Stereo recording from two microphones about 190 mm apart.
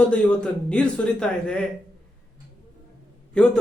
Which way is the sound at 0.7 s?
5° left (ahead or behind).